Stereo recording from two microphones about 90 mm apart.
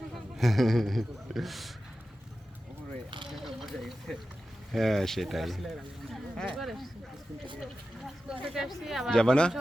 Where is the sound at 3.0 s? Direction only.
60° right (ahead or behind).